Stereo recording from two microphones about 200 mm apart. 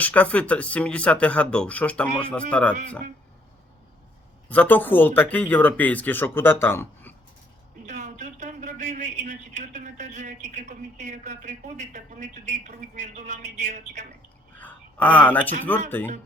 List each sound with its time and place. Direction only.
0.0 s speech: 5° left (ahead or behind)
4.4 s speech: 10° left (ahead or behind)
7.9 s a sound: 35° right (ahead or behind)
10.4 s a woman's voice: 35° right (ahead or behind)
14.6 s a sound: 10° left (ahead or behind)
16.0 s speech: 10° left (ahead or behind)